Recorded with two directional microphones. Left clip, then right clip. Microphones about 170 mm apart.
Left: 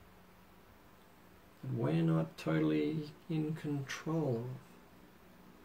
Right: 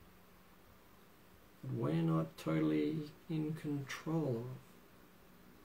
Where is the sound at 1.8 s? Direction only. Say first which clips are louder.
Left 2 dB; 20° right (ahead or behind).